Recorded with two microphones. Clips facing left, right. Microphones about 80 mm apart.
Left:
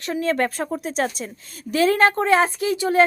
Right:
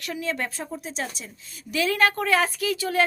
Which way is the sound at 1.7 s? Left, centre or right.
Left.